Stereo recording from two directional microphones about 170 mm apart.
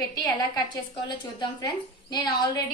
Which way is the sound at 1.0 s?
25° left (ahead or behind).